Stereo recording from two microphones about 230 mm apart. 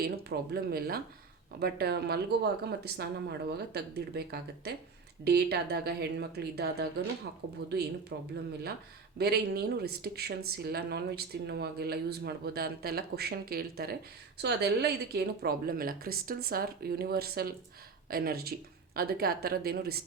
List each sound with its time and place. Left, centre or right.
0.0 s a woman's voice: right
8.1 s a woman's voice: right